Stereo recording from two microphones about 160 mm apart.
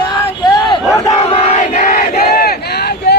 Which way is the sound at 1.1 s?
40° left (ahead or behind).